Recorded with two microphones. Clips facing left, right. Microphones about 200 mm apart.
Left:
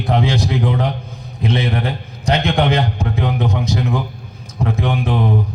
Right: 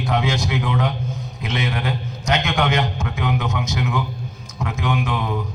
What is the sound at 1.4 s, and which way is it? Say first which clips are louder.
A man's voice: left 6 dB; 30° left (ahead or behind).